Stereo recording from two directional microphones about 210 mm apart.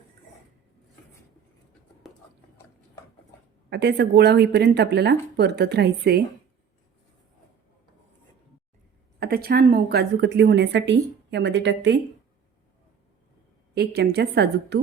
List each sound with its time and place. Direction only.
3.7 s speech: 55° right (ahead or behind)
9.2 s a woman's voice: 50° right (ahead or behind)
13.7 s speech: 50° right (ahead or behind)